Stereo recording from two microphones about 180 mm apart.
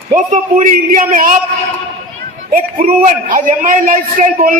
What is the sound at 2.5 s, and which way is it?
A man's voice, 50° right (ahead or behind).